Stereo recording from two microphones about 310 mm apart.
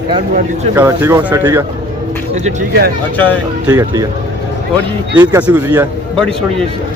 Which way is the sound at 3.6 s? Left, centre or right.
Centre.